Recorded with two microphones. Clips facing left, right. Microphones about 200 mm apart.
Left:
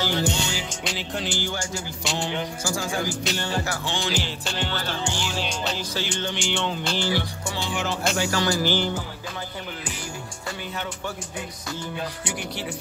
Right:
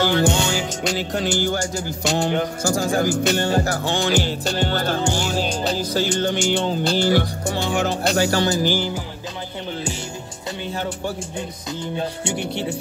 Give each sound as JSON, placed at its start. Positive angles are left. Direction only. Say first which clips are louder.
{"t": 0.0, "sound": "music", "louder": "right 7 dB", "side_deg": -55}
{"t": 7.1, "sound": "music", "louder": "right 7 dB", "side_deg": -50}
{"t": 8.5, "sound": "music", "louder": "right 3 dB", "side_deg": -15}
{"t": 11.8, "sound": "music", "louder": "right 7 dB", "side_deg": -25}